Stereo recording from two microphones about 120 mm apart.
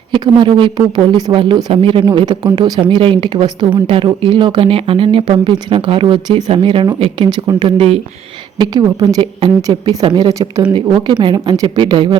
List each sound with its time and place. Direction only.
0.1 s speech: 40° right (ahead or behind)
8.5 s speech: 35° right (ahead or behind)